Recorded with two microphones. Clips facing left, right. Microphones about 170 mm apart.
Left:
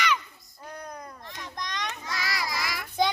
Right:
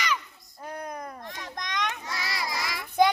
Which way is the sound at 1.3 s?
50° right (ahead or behind).